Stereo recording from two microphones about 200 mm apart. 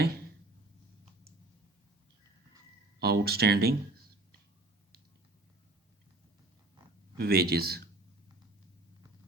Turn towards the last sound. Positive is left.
turn(degrees=-50)  # may be behind; listen again after turning